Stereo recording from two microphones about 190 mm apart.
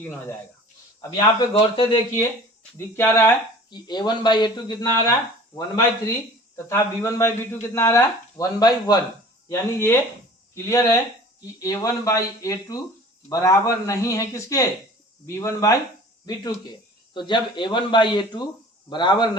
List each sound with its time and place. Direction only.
1.1 s speech: 25° left (ahead or behind)
2.7 s speech: 15° left (ahead or behind)
6.7 s speech: 15° left (ahead or behind)